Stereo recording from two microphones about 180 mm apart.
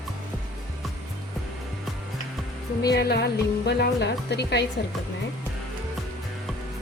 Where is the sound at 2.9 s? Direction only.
65° left (ahead or behind).